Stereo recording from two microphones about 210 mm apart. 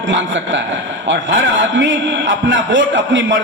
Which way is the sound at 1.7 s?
60° right (ahead or behind).